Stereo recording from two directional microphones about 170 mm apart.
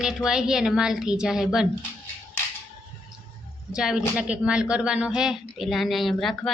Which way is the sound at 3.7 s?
5° right (ahead or behind).